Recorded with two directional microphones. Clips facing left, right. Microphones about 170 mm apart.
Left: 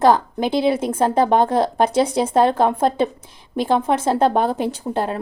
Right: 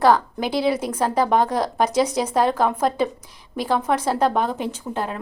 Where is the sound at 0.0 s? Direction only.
20° left (ahead or behind).